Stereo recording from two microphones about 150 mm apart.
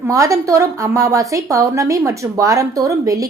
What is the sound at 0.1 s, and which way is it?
A woman's voice, 20° right (ahead or behind).